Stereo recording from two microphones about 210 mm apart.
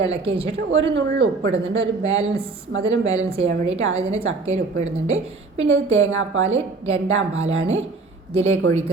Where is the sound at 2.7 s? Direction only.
65° right (ahead or behind).